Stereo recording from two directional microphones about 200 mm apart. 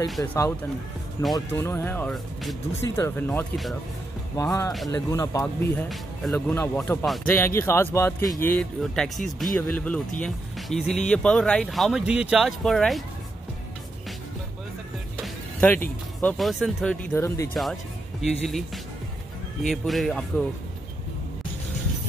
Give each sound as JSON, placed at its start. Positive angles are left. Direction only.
{"t": 0.2, "sound": "speech", "side_deg": 15}
{"t": 15.2, "sound": "speech", "side_deg": 10}
{"t": 18.2, "sound": "speech", "side_deg": 0}
{"t": 19.7, "sound": "speech", "side_deg": 0}